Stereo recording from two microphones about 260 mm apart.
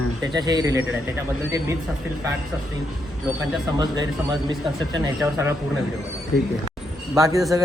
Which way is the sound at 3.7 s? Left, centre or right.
Centre.